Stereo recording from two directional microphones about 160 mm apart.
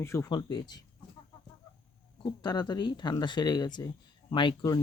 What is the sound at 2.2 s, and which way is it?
Speech, 25° left (ahead or behind).